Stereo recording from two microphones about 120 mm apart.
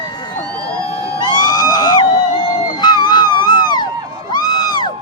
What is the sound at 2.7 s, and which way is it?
Music, 35° left (ahead or behind).